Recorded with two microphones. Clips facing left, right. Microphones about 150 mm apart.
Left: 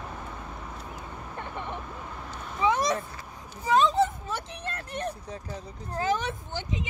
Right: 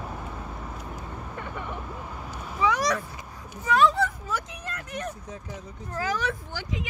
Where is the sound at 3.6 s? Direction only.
25° left (ahead or behind).